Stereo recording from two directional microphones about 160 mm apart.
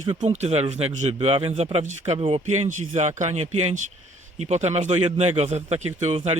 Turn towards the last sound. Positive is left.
turn(degrees=-40)  # may be behind; listen again after turning